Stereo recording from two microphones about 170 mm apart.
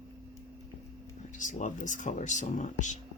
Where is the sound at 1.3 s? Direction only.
45° left (ahead or behind).